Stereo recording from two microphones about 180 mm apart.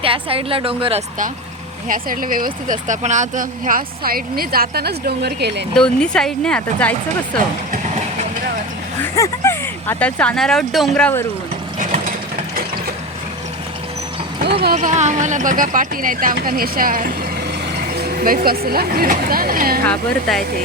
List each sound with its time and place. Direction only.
0.0 s a woman's voice: 30° right (ahead or behind)
1.9 s speech: 50° right (ahead or behind); by 5.6 s 65° right (ahead or behind)
5.7 s speech: 5° left (ahead or behind)
7.7 s vehicle: 40° right (ahead or behind)
9.1 s speech: 15° left (ahead or behind)
11.8 s mechanisms: 45° right (ahead or behind)
14.8 s speech: 40° right (ahead or behind)
19.9 s speech: centre (ahead or behind)